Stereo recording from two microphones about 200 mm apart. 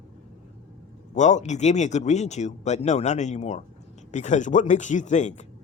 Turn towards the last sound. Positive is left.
turn(degrees=35)  # may be behind; listen again after turning